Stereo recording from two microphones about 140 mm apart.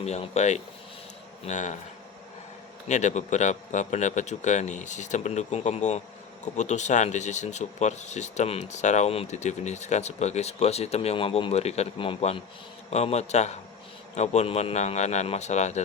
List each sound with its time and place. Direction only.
0.0 s a man's voice: 55° left (ahead or behind)
2.9 s a man's voice: 55° left (ahead or behind)